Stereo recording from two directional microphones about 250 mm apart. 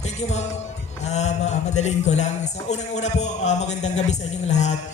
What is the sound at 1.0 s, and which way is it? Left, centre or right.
Speech, left.